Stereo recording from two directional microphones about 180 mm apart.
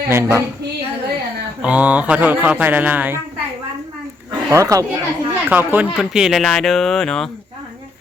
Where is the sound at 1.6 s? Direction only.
10° right (ahead or behind).